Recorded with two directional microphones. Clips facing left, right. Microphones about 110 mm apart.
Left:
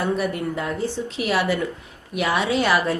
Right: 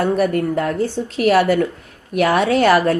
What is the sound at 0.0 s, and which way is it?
A woman's voice, 50° right (ahead or behind).